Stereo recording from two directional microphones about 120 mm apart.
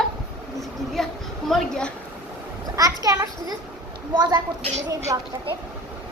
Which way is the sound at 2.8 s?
30° right (ahead or behind).